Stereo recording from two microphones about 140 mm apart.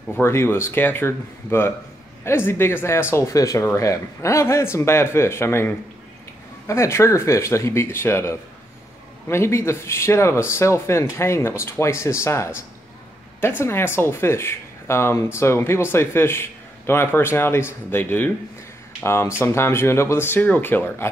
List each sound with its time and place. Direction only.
0.1 s a man's voice: 20° left (ahead or behind)
6.7 s a man's voice: 20° left (ahead or behind)